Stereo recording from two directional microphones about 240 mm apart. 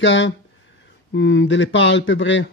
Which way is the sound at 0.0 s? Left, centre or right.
Left.